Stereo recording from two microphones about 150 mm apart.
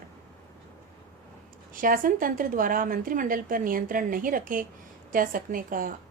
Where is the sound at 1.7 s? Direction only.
65° right (ahead or behind).